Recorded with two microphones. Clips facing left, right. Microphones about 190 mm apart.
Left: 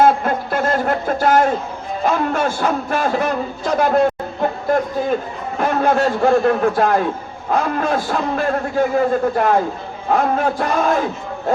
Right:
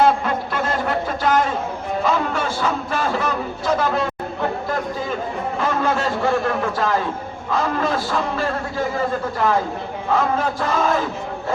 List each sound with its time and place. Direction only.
0.0 s a sound: 45° left (ahead or behind)
3.8 s a man's voice: 50° left (ahead or behind)
5.5 s a man's voice: 55° left (ahead or behind)